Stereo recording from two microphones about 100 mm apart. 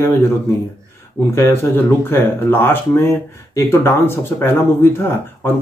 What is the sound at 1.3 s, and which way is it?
Speech, 25° left (ahead or behind).